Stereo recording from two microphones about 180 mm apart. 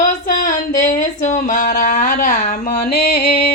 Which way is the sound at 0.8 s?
45° left (ahead or behind).